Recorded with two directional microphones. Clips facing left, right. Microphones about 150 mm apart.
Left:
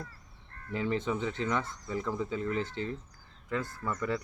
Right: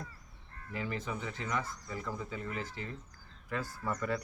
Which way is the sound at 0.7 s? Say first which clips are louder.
Left 7 dB; 25° left (ahead or behind).